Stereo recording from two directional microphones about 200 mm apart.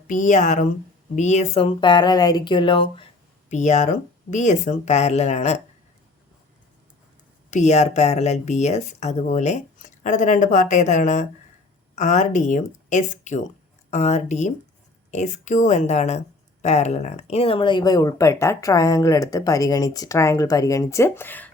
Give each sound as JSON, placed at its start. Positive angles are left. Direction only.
{"t": 0.1, "sound": "a woman's voice", "side_deg": 40}
{"t": 3.5, "sound": "speech", "side_deg": 35}
{"t": 7.5, "sound": "a woman's voice", "side_deg": 35}